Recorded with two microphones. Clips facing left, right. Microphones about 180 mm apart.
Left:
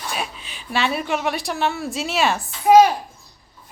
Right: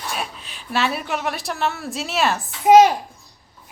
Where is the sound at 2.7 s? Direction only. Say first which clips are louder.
Right 1 dB; 20° right (ahead or behind).